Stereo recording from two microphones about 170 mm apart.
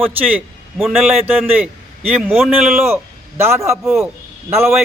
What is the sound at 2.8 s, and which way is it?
Speech, 15° right (ahead or behind).